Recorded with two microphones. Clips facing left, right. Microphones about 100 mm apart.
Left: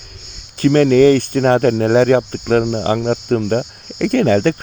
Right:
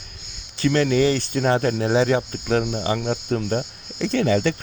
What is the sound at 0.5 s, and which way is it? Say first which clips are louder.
Speech: left 8 dB; 45° left (ahead or behind).